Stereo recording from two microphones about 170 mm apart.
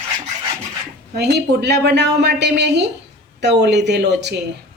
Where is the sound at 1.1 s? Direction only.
75° right (ahead or behind).